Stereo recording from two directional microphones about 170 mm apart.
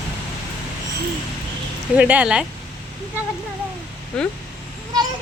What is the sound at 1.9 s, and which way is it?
Speech, 10° right (ahead or behind).